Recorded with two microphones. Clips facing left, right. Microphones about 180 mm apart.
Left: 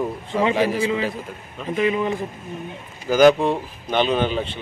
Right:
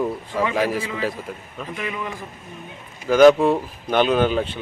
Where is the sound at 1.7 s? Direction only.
25° left (ahead or behind).